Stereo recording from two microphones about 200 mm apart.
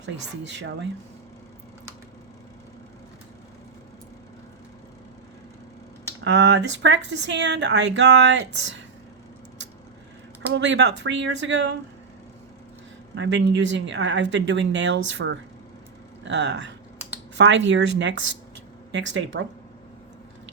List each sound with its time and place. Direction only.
0.0 s speech: 60° right (ahead or behind)
6.2 s speech: 65° right (ahead or behind)
10.5 s speech: 60° right (ahead or behind)
13.1 s speech: 65° right (ahead or behind)